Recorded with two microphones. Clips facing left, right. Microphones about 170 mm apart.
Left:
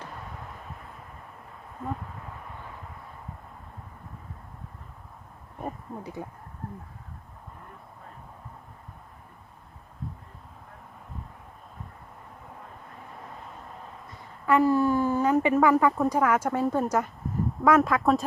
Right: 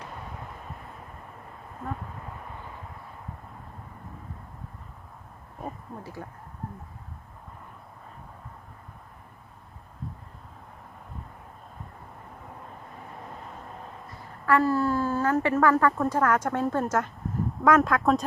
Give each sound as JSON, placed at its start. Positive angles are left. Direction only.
{"t": 1.8, "sound": "speech", "side_deg": 0}
{"t": 6.0, "sound": "speech", "side_deg": 20}
{"t": 14.4, "sound": "a woman's voice", "side_deg": 20}